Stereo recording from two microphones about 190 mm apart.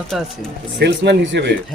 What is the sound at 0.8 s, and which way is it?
Speech, 60° right (ahead or behind).